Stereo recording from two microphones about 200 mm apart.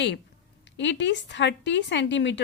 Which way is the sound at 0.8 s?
60° left (ahead or behind).